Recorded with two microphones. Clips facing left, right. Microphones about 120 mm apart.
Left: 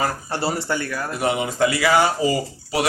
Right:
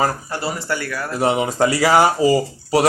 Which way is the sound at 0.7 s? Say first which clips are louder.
Even; 20° left (ahead or behind).